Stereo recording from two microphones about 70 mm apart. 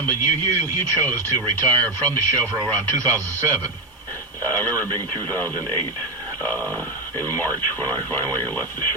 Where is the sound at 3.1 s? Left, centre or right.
Right.